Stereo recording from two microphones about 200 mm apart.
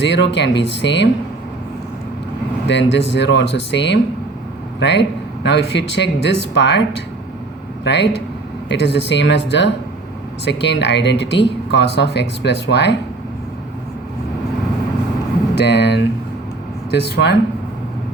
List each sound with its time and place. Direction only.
0.0 s speech: 60° left (ahead or behind)
2.6 s speech: 60° left (ahead or behind)
7.9 s speech: 60° left (ahead or behind)
15.5 s speech: 55° left (ahead or behind)